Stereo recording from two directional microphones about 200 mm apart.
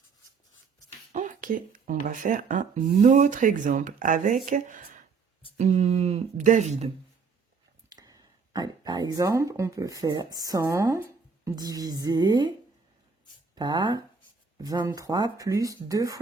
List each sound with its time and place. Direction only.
1.1 s speech: 40° right (ahead or behind)
7.9 s a woman's voice: 20° right (ahead or behind)
13.6 s a woman's voice: 25° right (ahead or behind)